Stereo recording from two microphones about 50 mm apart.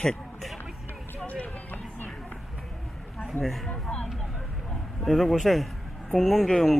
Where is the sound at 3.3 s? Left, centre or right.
Centre.